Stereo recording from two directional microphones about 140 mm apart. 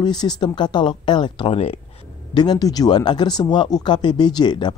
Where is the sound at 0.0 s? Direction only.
30° left (ahead or behind).